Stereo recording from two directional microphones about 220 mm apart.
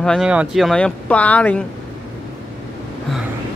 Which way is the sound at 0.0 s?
Centre (ahead or behind).